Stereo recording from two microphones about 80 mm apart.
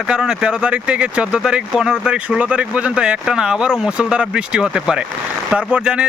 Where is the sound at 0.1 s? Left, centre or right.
Centre.